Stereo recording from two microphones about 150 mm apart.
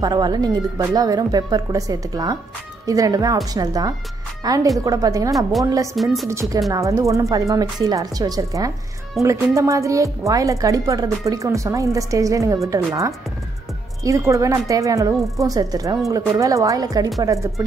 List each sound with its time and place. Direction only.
0.0 s speech: 25° right (ahead or behind)
6.0 s a woman's voice: centre (ahead or behind)
6.7 s speech: 20° right (ahead or behind)